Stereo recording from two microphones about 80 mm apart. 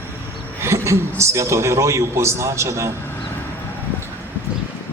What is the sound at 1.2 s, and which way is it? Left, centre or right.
A man's voice, right.